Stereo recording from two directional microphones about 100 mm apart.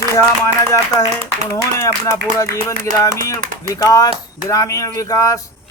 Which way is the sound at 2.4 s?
30° left (ahead or behind).